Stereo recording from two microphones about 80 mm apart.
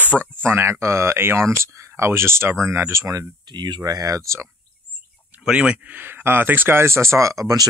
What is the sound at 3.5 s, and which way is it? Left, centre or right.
Speech, right.